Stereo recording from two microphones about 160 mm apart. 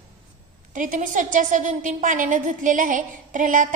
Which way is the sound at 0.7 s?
55° right (ahead or behind).